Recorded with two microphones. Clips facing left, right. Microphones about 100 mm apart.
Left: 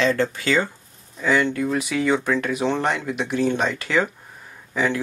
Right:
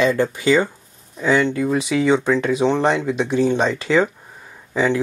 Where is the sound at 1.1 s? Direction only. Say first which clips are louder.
Right 3 dB; 5° right (ahead or behind).